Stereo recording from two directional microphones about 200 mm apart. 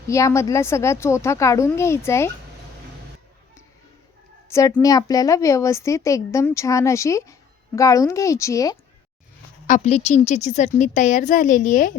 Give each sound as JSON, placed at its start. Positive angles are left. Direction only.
{"t": 0.1, "sound": "a woman's voice", "side_deg": 15}
{"t": 4.4, "sound": "a woman's voice", "side_deg": 15}
{"t": 9.6, "sound": "a woman's voice", "side_deg": 35}